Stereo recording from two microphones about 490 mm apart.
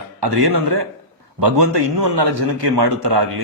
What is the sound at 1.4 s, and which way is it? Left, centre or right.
A man's voice, right.